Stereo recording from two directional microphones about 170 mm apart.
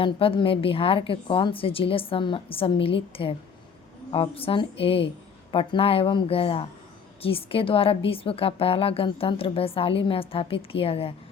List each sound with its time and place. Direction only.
0.0 s a woman's voice: 30° left (ahead or behind)